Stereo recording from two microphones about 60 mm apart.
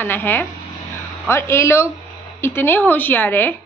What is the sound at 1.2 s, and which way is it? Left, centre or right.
A woman's voice, left.